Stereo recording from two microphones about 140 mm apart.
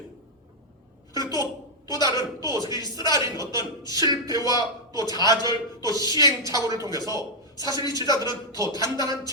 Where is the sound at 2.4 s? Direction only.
25° right (ahead or behind).